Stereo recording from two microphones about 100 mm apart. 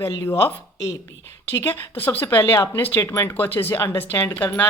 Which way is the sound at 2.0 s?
20° left (ahead or behind).